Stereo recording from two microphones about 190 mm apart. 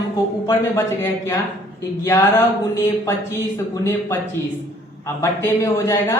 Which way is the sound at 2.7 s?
15° left (ahead or behind).